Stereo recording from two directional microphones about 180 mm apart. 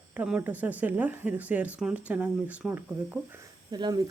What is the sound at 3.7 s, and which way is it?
Speech, 20° right (ahead or behind).